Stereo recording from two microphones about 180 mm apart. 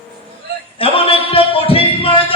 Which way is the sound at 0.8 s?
30° left (ahead or behind).